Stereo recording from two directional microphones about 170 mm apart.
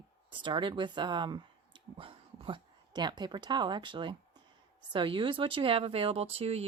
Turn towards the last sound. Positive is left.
turn(degrees=-35)  # may be behind; listen again after turning